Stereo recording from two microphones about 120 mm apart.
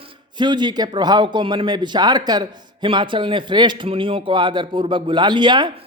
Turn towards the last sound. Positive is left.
turn(degrees=-40)  # may be behind; listen again after turning